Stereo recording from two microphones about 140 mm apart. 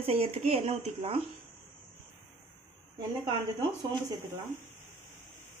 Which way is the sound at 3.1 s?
30° right (ahead or behind).